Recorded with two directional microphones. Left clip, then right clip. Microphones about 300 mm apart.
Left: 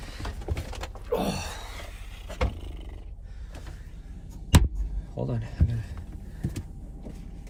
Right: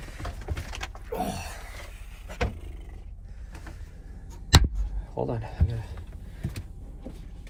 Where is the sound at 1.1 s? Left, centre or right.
Centre.